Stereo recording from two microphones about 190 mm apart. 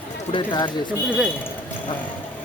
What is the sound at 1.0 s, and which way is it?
Speech, 5° right (ahead or behind).